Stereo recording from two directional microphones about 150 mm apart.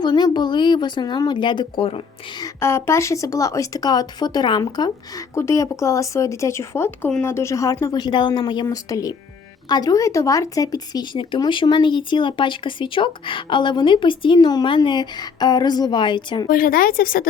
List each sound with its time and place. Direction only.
0.0 s speech: 30° left (ahead or behind)
2.4 s speech: 15° left (ahead or behind)
16.5 s speech: 70° left (ahead or behind)